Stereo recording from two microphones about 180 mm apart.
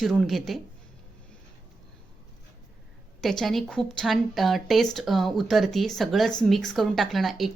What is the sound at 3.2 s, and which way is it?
A woman's voice, centre (ahead or behind).